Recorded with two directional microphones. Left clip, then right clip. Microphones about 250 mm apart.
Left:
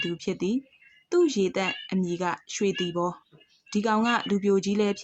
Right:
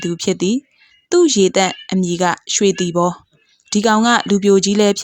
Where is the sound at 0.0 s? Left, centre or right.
Right.